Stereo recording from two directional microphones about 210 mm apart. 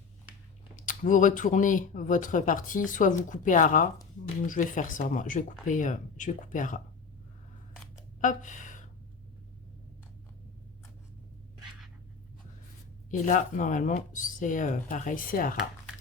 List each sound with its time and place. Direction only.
0.8 s speech: 40° left (ahead or behind)
8.2 s speech: 40° left (ahead or behind)
13.1 s speech: 35° left (ahead or behind)